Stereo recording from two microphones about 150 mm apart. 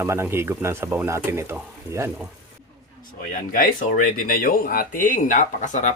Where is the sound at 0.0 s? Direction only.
15° right (ahead or behind).